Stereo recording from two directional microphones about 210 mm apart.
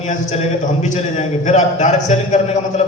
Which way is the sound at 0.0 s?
35° left (ahead or behind).